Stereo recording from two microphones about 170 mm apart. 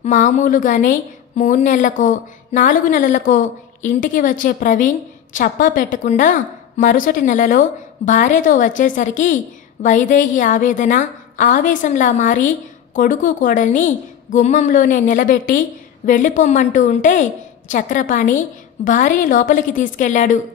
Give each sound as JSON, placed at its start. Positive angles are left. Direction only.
{"t": 0.0, "sound": "a woman's voice", "side_deg": 45}